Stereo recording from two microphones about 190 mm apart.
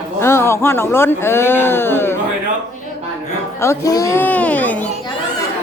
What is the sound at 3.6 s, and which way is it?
Speech, 15° left (ahead or behind).